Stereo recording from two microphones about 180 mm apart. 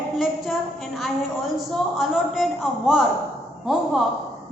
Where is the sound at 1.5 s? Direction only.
Centre (ahead or behind).